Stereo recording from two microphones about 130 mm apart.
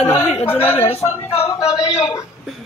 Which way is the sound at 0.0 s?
55° left (ahead or behind).